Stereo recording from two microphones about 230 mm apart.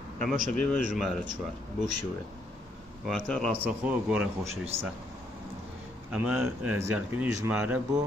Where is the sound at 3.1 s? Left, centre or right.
Centre.